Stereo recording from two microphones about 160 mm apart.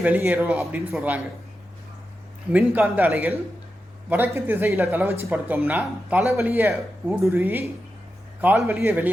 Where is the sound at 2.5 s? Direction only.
10° right (ahead or behind).